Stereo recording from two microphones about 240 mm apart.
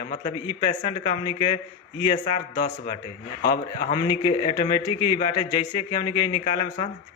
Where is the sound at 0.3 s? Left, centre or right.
Centre.